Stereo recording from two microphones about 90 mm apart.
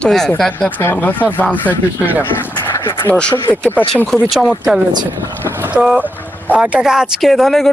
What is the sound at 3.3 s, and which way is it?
Speech, 20° left (ahead or behind).